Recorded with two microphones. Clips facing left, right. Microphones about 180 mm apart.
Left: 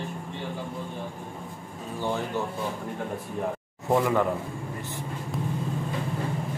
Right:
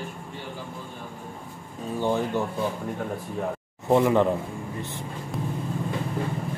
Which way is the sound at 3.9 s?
20° right (ahead or behind).